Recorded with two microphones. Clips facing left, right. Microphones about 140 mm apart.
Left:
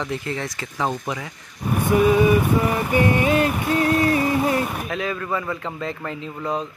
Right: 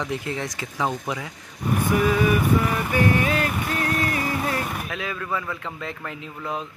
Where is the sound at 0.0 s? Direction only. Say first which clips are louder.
Left 1 dB; 10° right (ahead or behind).